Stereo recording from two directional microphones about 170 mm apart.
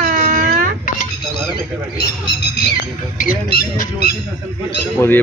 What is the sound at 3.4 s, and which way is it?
Speech, 65° left (ahead or behind).